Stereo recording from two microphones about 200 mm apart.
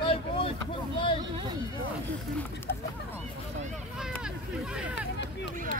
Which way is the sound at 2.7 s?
50° left (ahead or behind).